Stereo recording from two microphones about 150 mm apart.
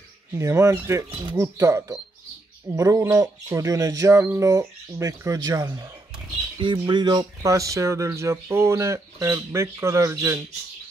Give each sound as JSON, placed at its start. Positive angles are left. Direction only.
{"t": 0.4, "sound": "speech", "side_deg": -20}